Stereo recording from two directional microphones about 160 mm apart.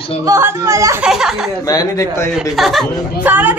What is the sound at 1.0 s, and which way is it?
Speech, 5° right (ahead or behind).